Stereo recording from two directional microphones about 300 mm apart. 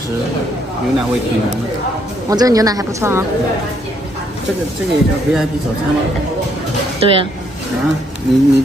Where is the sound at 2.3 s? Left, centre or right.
Centre.